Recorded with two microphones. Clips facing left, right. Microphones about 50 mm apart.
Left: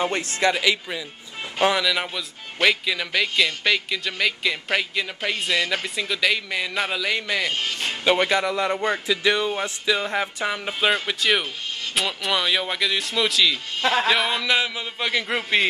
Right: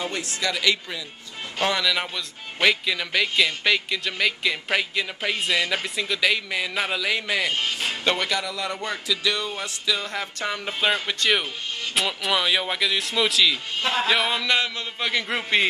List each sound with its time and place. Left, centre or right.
0.0 s speech: left
0.6 s speech: centre
8.2 s speech: left
10.4 s speech: centre